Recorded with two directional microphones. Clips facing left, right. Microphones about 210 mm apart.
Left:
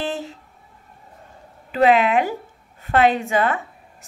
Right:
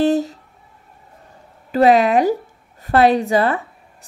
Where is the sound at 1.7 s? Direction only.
40° right (ahead or behind).